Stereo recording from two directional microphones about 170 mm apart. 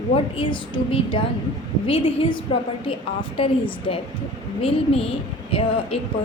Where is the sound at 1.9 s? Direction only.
30° left (ahead or behind).